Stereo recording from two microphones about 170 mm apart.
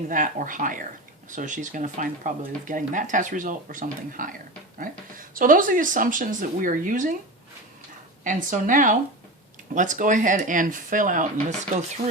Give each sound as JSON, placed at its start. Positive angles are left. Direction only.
{"t": 0.1, "sound": "speech", "side_deg": -50}
{"t": 8.2, "sound": "speech", "side_deg": -50}